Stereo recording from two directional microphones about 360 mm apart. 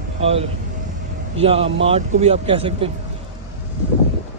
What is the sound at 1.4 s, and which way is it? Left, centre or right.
Speech, centre.